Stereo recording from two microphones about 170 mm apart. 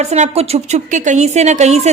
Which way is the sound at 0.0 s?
40° right (ahead or behind).